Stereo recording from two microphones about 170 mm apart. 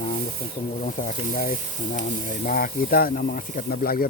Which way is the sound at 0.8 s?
55° left (ahead or behind).